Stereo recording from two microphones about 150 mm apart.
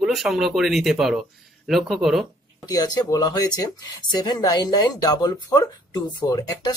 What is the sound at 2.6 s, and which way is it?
Speech, 25° left (ahead or behind).